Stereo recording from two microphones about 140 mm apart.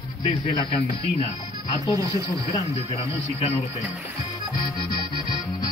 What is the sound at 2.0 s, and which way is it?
Speech, 25° right (ahead or behind).